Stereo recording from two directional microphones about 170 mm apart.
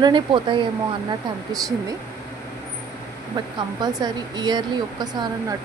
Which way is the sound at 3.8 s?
25° right (ahead or behind).